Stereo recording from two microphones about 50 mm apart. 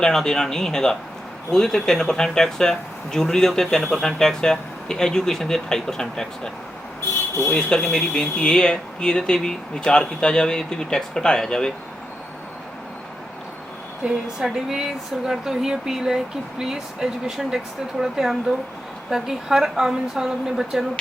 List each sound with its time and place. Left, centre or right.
0.0 s speech: centre
7.5 s speech: centre
14.0 s speech: centre